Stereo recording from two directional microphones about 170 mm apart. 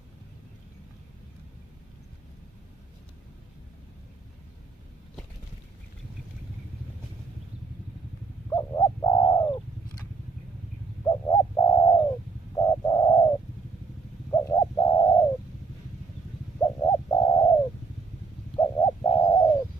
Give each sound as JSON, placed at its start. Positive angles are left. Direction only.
{"t": 8.5, "sound": "bird", "side_deg": 25}
{"t": 11.1, "sound": "bird", "side_deg": 20}
{"t": 16.5, "sound": "bird", "side_deg": 20}
{"t": 18.8, "sound": "bird", "side_deg": 25}